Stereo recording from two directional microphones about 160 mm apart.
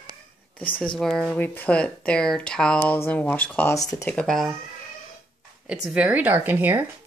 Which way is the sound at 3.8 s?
20° left (ahead or behind).